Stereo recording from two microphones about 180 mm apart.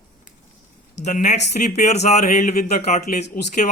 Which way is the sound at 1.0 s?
40° left (ahead or behind).